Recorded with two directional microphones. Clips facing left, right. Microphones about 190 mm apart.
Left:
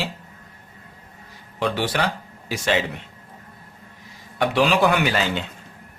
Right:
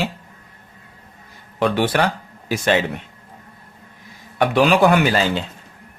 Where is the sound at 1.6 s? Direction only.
55° right (ahead or behind).